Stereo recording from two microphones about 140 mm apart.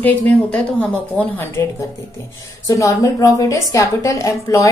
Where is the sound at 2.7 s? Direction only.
25° left (ahead or behind).